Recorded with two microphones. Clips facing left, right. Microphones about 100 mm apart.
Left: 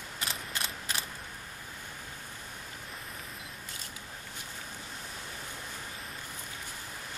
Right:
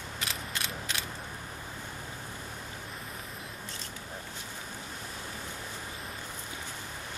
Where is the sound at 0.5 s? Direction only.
40° left (ahead or behind).